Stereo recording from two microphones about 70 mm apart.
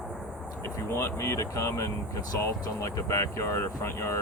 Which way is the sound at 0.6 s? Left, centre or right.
Left.